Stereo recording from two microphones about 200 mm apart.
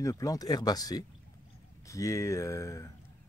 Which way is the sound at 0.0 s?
15° left (ahead or behind).